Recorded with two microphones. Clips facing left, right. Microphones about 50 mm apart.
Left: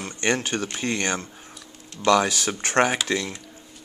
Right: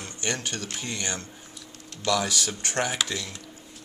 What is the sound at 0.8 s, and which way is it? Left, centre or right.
Speech, left.